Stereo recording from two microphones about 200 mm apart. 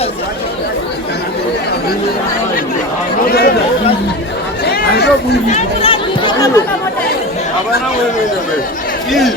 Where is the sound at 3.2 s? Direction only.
50° left (ahead or behind).